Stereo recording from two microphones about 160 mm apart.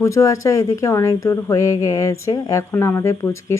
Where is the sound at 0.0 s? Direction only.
20° left (ahead or behind).